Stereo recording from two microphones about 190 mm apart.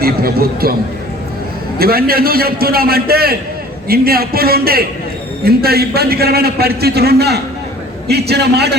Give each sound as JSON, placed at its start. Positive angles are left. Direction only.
{"t": 0.0, "sound": "a man's voice", "side_deg": -50}
{"t": 1.8, "sound": "a man's voice", "side_deg": -50}